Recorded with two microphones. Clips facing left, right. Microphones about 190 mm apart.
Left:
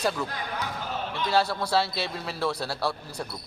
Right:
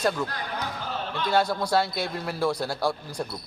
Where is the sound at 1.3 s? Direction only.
5° left (ahead or behind).